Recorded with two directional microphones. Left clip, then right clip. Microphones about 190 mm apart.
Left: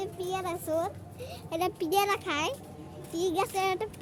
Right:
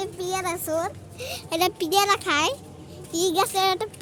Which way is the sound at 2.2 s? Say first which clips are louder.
Right 8 dB; 25° right (ahead or behind).